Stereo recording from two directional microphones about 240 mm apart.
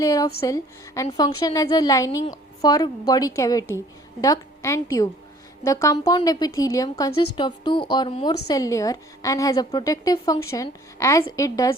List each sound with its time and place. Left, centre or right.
0.0 s a woman's voice: centre